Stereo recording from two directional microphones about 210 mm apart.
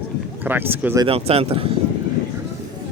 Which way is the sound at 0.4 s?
10° right (ahead or behind).